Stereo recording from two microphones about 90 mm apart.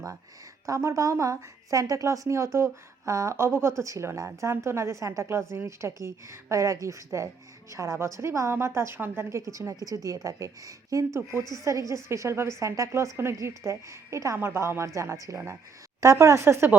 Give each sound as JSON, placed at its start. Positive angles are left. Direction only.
{"t": 0.6, "sound": "speech", "side_deg": -35}